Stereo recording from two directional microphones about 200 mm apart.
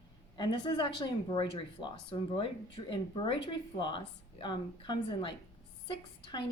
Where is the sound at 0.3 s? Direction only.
20° left (ahead or behind).